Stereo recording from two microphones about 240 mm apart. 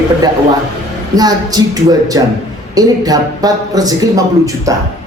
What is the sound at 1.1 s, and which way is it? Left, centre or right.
Speech, centre.